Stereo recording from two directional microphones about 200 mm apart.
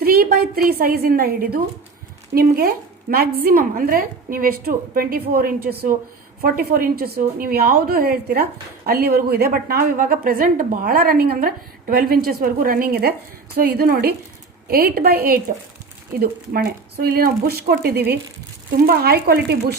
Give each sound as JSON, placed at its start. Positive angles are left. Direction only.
{"t": 0.0, "sound": "a woman's voice", "side_deg": -50}